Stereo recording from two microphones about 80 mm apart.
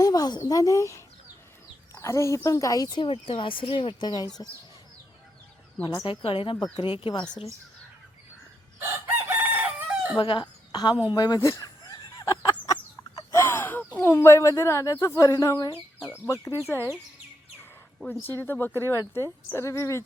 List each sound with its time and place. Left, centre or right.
0.0 s speech: left
3.0 s speech: left
6.1 s speech: left
8.8 s chicken: right
10.2 s a woman's voice: left
11.3 s a sound: left
12.4 s a sound: left
13.3 s a sound: left
14.0 s speech: left
18.2 s speech: left